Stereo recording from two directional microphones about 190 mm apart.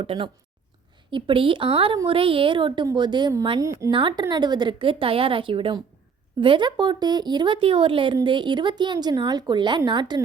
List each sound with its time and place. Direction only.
0.0 s speech: 30° right (ahead or behind)